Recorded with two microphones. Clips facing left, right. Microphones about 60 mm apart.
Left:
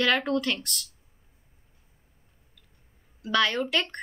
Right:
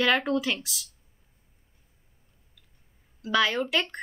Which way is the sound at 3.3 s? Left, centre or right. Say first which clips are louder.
Even; centre.